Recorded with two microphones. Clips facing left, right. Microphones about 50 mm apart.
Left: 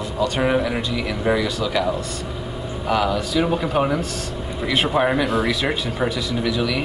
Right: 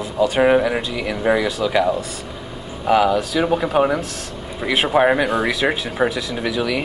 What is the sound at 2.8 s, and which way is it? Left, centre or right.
A man's voice, centre.